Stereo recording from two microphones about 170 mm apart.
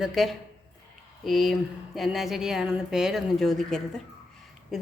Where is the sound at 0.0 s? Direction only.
Centre (ahead or behind).